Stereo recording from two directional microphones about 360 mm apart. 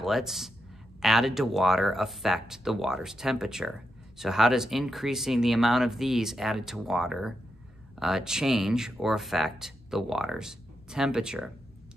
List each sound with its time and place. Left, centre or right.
0.0 s speech: centre